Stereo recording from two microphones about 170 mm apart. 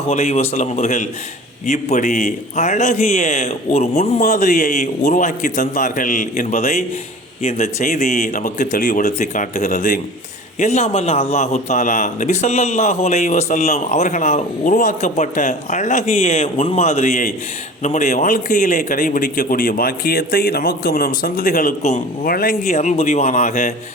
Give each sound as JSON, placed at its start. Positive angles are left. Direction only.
{"t": 0.1, "sound": "a man's voice", "side_deg": 40}
{"t": 22.6, "sound": "speech", "side_deg": 45}